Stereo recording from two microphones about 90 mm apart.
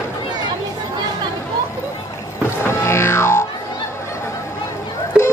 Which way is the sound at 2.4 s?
30° left (ahead or behind).